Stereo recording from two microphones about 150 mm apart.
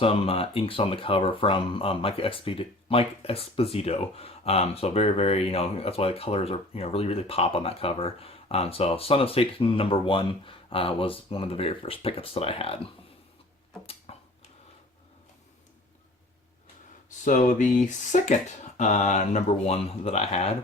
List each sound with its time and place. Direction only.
0.0 s speech: 40° left (ahead or behind)
14.1 s a sound: 40° left (ahead or behind)
17.1 s speech: 60° left (ahead or behind); by 20.6 s 40° left (ahead or behind)